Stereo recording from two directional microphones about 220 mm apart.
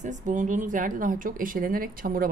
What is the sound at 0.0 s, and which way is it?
A woman's voice, 35° right (ahead or behind).